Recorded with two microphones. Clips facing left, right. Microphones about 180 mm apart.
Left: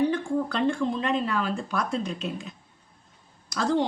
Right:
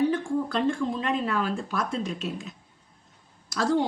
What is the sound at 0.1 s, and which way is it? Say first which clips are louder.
Speech: even; 5° right (ahead or behind).